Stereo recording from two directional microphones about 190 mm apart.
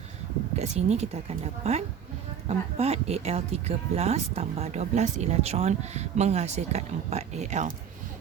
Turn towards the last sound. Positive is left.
turn(degrees=-40)  # may be behind; listen again after turning